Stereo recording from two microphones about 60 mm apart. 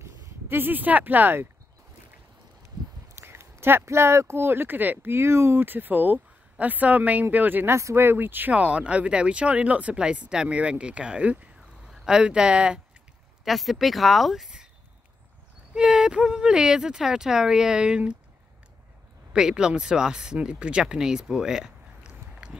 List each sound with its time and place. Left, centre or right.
0.0 s speech: right
3.2 s speech: right
5.1 s speech: right
5.6 s speech: right
7.7 s speech: right
8.5 s speech: centre
11.9 s a sound: centre
12.2 s speech: centre
13.4 s speech: centre
15.7 s speech: centre
19.3 s speech: centre